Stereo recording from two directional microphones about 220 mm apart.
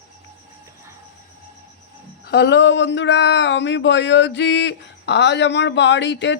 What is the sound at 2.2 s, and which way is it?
Speech, 50° left (ahead or behind).